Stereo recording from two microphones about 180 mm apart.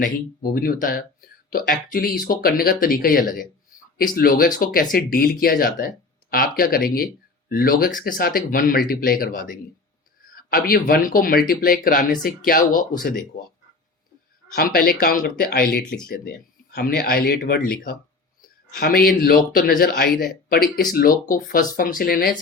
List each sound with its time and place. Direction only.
0.5 s speech: 50° left (ahead or behind)
14.5 s speech: 55° left (ahead or behind)